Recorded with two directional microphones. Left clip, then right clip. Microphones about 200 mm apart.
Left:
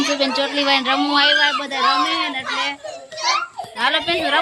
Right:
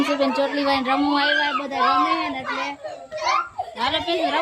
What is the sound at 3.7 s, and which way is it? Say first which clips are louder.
Speech: left 4 dB; centre (ahead or behind).